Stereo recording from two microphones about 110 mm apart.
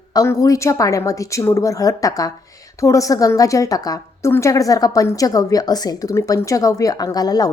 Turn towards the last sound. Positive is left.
turn(degrees=35)  # may be behind; listen again after turning